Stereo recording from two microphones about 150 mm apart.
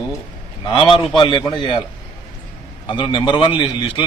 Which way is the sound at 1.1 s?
30° left (ahead or behind).